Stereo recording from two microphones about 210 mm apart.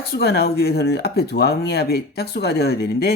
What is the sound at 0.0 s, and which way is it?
Speech, 50° left (ahead or behind).